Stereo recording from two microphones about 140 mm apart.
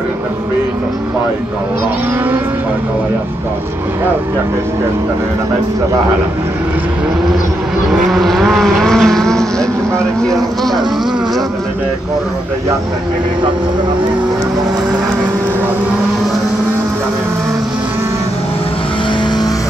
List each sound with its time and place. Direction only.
8.1 s speech: centre (ahead or behind)